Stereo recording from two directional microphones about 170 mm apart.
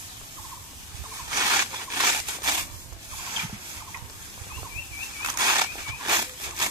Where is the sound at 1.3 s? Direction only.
20° right (ahead or behind).